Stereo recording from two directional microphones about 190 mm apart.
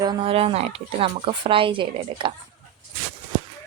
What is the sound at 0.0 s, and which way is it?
A woman's voice, 25° right (ahead or behind).